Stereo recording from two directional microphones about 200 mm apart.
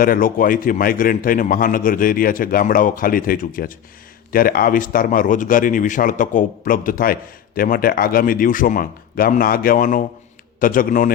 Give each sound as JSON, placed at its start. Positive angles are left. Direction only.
{"t": 0.0, "sound": "a man's voice", "side_deg": 45}